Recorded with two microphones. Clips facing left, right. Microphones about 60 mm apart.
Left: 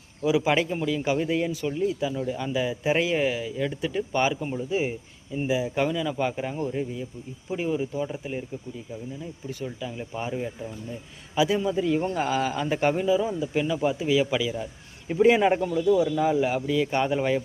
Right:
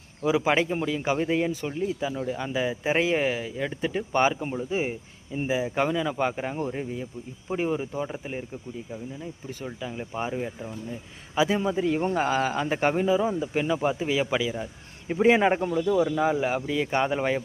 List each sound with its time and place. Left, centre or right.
0.2 s speech: right
9.6 s speech: centre
11.3 s speech: right